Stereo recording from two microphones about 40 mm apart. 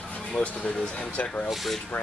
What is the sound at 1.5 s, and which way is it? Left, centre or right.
Speech, centre.